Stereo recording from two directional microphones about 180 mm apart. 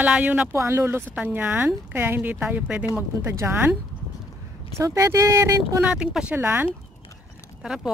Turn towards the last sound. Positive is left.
turn(degrees=-5)  # may be behind; listen again after turning